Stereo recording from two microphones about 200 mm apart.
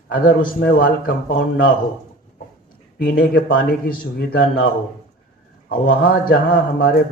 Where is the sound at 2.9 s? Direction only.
50° left (ahead or behind).